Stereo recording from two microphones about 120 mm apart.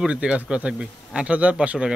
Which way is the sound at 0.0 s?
10° right (ahead or behind).